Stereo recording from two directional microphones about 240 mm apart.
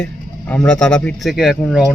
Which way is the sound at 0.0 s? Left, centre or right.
Centre.